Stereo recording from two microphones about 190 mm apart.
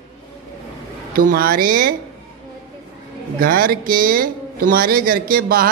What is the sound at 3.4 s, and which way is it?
Speech, 50° right (ahead or behind).